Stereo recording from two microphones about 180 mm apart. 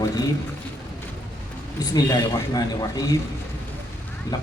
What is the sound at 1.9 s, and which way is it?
A man's voice, 20° left (ahead or behind).